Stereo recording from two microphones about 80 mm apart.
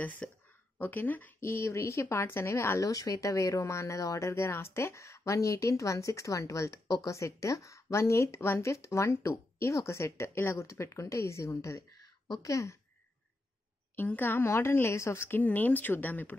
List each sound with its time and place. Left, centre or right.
0.0 s a woman's voice: centre
1.4 s speech: left
2.8 s speech: left
7.2 s speech: left
13.9 s a woman's voice: left